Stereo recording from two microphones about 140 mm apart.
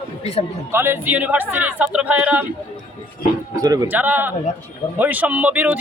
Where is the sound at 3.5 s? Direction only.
25° right (ahead or behind).